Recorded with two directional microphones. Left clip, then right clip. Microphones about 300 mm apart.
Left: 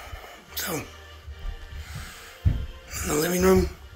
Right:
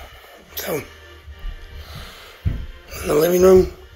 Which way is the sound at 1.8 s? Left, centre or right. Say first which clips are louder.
Right 4 dB; centre.